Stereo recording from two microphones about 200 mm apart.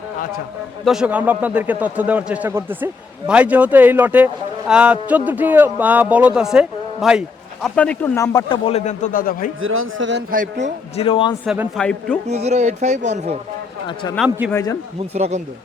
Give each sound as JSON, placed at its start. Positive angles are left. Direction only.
{"t": 0.9, "sound": "a man's voice", "side_deg": -5}
{"t": 9.6, "sound": "a man's voice", "side_deg": -85}
{"t": 10.3, "sound": "speech", "side_deg": -40}
{"t": 10.9, "sound": "speech", "side_deg": 25}
{"t": 11.4, "sound": "a man's voice", "side_deg": -10}
{"t": 11.8, "sound": "a man's voice", "side_deg": 5}
{"t": 12.3, "sound": "speech", "side_deg": -35}
{"t": 14.3, "sound": "a man's voice", "side_deg": -10}
{"t": 14.5, "sound": "a man's voice", "side_deg": 15}
{"t": 15.1, "sound": "speech", "side_deg": -35}